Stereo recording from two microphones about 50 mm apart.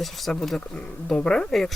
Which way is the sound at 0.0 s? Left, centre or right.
Centre.